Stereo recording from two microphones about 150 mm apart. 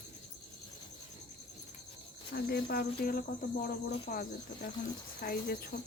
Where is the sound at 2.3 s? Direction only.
90° left.